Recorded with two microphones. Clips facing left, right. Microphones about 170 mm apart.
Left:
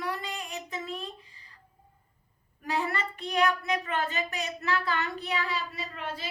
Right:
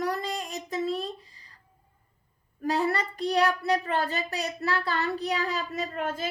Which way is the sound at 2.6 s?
35° right (ahead or behind).